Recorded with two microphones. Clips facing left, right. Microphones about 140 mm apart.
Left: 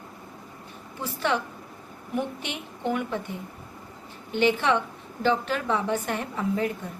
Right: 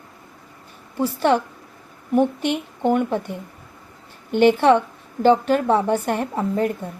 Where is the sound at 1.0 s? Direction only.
45° right (ahead or behind).